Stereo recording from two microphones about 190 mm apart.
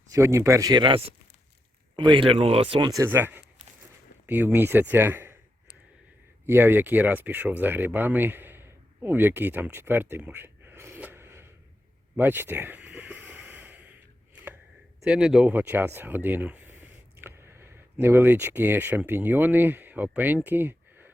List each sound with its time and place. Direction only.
0.1 s speech: 15° right (ahead or behind)
2.9 s speech: 15° right (ahead or behind)
12.1 s a sound: 10° right (ahead or behind)
15.0 s speech: 5° right (ahead or behind)